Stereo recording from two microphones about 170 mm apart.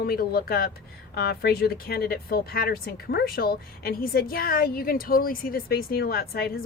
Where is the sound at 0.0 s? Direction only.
60° left (ahead or behind).